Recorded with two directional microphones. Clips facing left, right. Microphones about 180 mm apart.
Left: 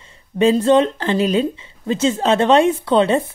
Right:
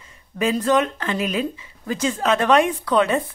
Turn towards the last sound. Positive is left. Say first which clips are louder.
# left 4 dB
turn(degrees=30)  # may be behind; listen again after turning